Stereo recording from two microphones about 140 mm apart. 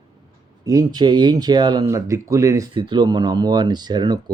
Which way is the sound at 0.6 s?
25° right (ahead or behind).